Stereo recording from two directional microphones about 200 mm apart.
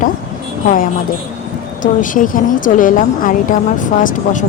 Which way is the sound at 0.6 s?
45° left (ahead or behind).